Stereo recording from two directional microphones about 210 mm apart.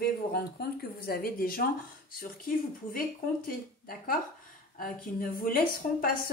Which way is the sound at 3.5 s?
45° left (ahead or behind).